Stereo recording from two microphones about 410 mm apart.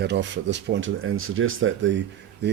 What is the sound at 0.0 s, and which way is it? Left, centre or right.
Speech, right.